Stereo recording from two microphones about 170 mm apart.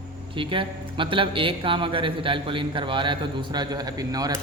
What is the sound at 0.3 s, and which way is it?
A man's voice, 30° right (ahead or behind).